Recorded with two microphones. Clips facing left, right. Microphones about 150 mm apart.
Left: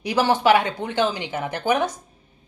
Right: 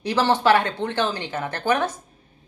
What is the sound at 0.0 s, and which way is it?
Speech, 10° left (ahead or behind).